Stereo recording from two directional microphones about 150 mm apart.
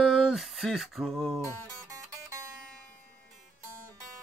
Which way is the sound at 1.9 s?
20° right (ahead or behind).